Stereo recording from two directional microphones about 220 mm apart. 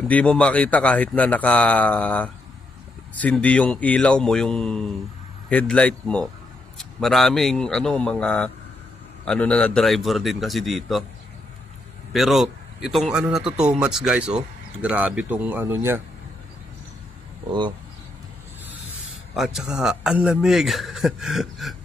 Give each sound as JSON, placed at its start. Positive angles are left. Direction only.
{"t": 0.1, "sound": "a man's voice", "side_deg": 5}
{"t": 12.1, "sound": "a man's voice", "side_deg": 0}
{"t": 17.5, "sound": "speech", "side_deg": -20}
{"t": 19.3, "sound": "a man's voice", "side_deg": 0}